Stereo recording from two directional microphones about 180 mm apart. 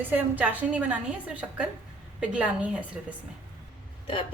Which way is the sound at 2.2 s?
5° right (ahead or behind).